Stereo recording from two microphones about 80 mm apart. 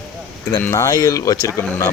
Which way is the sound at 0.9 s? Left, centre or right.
Left.